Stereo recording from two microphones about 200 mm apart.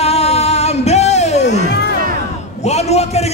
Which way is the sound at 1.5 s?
55° left (ahead or behind).